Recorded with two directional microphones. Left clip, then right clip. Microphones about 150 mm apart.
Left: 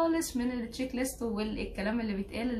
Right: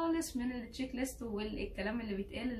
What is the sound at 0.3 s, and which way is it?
A woman's voice, 15° left (ahead or behind).